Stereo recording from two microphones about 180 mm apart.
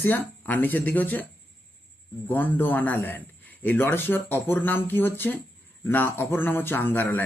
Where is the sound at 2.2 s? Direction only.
10° left (ahead or behind).